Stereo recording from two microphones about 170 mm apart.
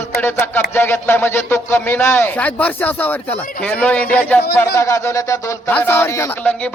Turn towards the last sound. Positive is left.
turn(degrees=10)  # may be behind; listen again after turning